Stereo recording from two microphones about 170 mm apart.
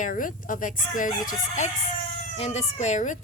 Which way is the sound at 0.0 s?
50° left (ahead or behind).